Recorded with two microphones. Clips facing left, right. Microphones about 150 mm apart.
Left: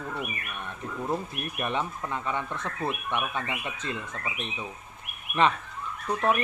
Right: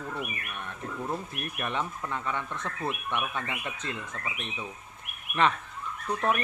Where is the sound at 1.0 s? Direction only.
20° left (ahead or behind).